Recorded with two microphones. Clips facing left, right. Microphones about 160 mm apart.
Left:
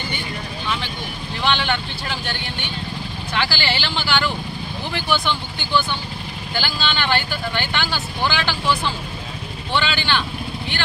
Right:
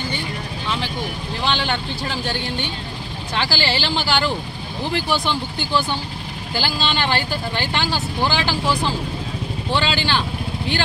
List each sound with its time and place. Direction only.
1.4 s speech: 35° right (ahead or behind)